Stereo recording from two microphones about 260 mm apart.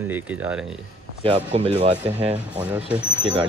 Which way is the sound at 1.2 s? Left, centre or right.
Right.